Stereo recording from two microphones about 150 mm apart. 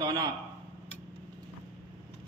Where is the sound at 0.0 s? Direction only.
25° right (ahead or behind).